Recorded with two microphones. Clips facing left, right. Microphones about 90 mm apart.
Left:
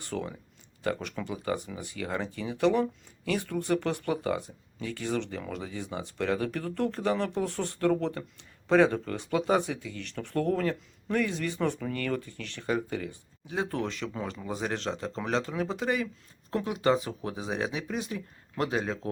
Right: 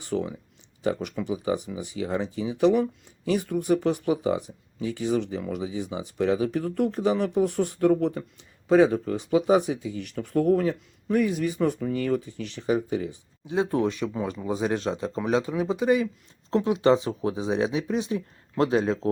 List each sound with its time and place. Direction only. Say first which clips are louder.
0.0 s speech: right 6 dB; 15° right (ahead or behind)
2.2 s speech: right 5 dB; 60° left (ahead or behind)
2.6 s speech: right 4 dB; 15° right (ahead or behind)